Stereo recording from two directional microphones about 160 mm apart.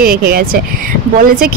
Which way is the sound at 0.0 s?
70° right (ahead or behind).